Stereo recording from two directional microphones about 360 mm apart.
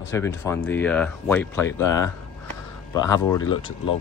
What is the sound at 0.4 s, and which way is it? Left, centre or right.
Speech, centre.